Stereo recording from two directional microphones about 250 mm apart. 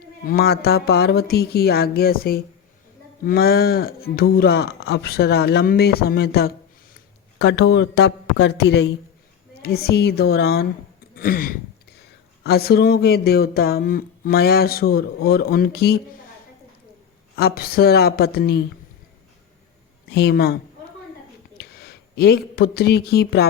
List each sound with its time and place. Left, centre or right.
0.3 s speech: left
11.1 s a sound: left
12.4 s speech: left
17.3 s speech: left
20.1 s speech: left
21.6 s speech: left